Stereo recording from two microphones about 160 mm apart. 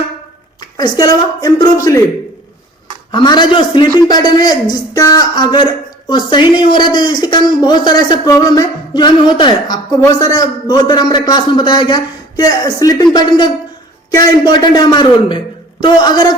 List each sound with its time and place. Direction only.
0.8 s speech: 25° left (ahead or behind)
3.1 s speech: 30° left (ahead or behind)